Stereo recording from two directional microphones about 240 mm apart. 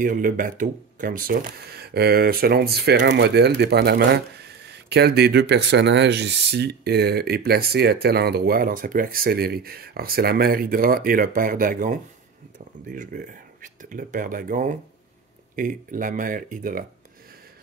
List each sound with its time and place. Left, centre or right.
0.0 s speech: right